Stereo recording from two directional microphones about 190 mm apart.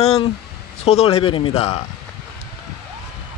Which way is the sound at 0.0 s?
35° left (ahead or behind).